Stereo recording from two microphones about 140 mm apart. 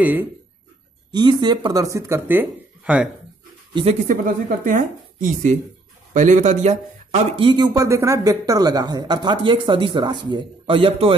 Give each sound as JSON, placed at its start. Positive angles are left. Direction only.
{"t": 0.0, "sound": "speech", "side_deg": -15}
{"t": 1.1, "sound": "speech", "side_deg": -30}
{"t": 3.8, "sound": "a man's voice", "side_deg": -65}
{"t": 7.3, "sound": "speech", "side_deg": -35}